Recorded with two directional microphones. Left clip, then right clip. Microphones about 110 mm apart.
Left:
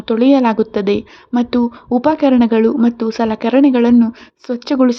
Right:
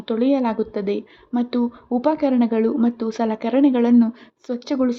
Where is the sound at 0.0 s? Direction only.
40° left (ahead or behind).